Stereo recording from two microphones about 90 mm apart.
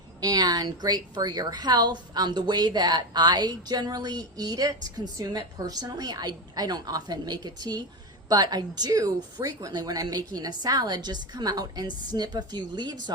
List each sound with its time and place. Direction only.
0.2 s a woman's voice: 45° right (ahead or behind)